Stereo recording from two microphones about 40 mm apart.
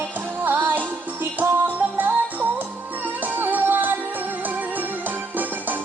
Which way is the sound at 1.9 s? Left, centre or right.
Right.